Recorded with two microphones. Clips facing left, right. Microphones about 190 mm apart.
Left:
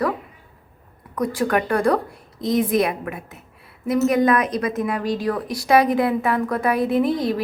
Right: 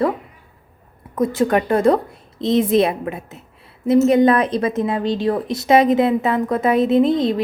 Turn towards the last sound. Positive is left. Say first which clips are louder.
# right 4 dB
turn(degrees=-20)  # may be behind; listen again after turning